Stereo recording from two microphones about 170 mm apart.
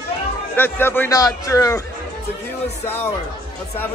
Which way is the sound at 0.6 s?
15° left (ahead or behind).